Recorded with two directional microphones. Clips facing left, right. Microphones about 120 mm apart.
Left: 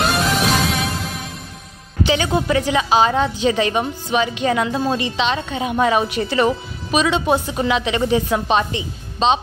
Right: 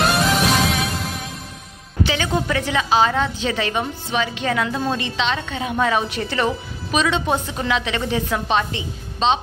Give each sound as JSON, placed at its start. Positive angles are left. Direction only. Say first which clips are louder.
{"t": 0.0, "sound": "music", "louder": "even", "side_deg": 0}
{"t": 2.0, "sound": "a woman's voice", "louder": "left 5 dB", "side_deg": 15}